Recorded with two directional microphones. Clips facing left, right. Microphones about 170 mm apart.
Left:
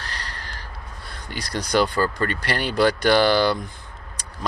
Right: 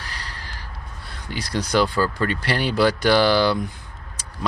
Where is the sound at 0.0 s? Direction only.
5° right (ahead or behind).